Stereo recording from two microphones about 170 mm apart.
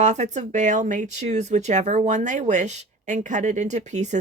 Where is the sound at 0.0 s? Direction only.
40° right (ahead or behind).